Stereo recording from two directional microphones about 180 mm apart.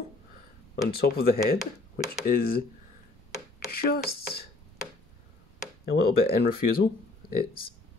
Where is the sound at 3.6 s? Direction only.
55° left (ahead or behind).